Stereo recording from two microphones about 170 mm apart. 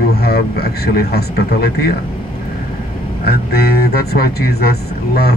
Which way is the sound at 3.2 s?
65° left (ahead or behind).